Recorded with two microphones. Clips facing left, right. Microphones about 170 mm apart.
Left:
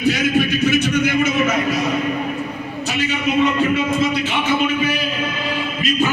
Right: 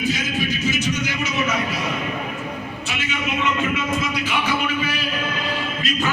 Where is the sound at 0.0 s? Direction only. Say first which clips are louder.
Left 7 dB; 65° left (ahead or behind).